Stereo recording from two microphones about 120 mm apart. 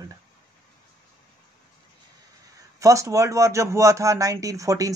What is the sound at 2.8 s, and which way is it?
Speech, 25° right (ahead or behind).